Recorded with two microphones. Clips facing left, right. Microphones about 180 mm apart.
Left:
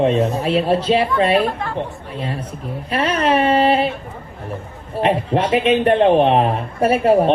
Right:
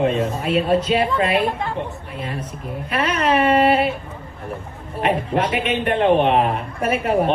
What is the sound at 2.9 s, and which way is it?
Speech, 30° left (ahead or behind).